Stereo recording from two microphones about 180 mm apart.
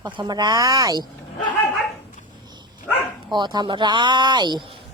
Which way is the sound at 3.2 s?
25° right (ahead or behind).